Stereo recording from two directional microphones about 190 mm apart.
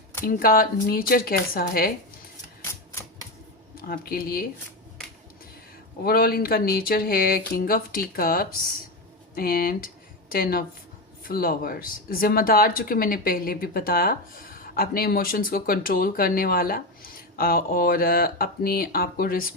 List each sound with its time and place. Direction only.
0.3 s speech: 50° left (ahead or behind)
3.8 s speech: 50° left (ahead or behind)
6.0 s speech: 50° left (ahead or behind)